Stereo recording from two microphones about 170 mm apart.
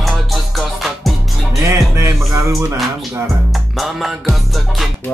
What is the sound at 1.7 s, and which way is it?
Music, 15° right (ahead or behind).